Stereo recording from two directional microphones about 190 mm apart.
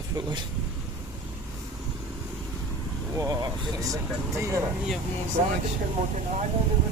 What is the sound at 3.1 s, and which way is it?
Speech, 20° right (ahead or behind).